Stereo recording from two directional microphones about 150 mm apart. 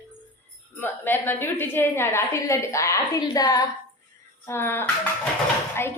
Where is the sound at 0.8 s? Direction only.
15° left (ahead or behind).